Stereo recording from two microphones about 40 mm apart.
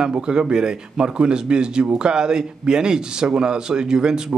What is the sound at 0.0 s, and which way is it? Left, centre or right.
A man's voice, centre.